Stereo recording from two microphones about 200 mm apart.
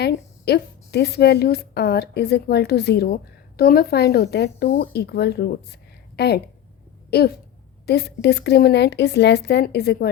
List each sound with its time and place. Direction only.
0.0 s a woman's voice: 55° left (ahead or behind)